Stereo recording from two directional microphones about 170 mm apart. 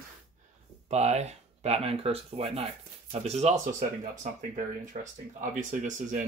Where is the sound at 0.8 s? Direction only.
40° right (ahead or behind).